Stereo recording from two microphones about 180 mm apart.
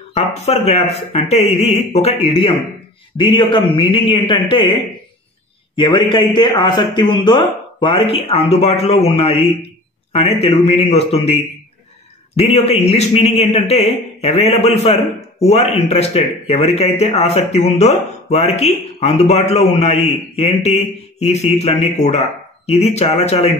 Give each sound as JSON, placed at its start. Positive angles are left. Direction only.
{"t": 0.1, "sound": "a man's voice", "side_deg": 35}
{"t": 5.8, "sound": "a man's voice", "side_deg": 25}